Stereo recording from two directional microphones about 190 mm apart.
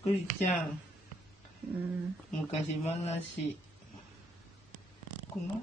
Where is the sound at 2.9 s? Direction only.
35° left (ahead or behind).